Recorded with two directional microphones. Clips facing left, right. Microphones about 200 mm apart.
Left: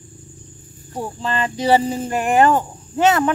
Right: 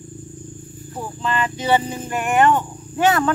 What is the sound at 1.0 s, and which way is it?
Speech, 35° left (ahead or behind).